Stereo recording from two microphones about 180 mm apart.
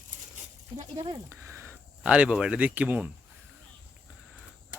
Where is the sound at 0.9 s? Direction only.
25° right (ahead or behind).